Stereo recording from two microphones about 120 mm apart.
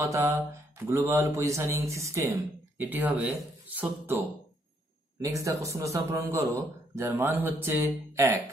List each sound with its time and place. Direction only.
0.0 s a man's voice: 25° right (ahead or behind)
5.2 s a man's voice: 30° right (ahead or behind)